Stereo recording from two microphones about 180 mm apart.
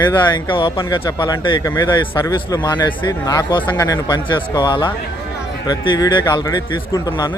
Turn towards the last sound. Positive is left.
turn(degrees=25)  # may be behind; listen again after turning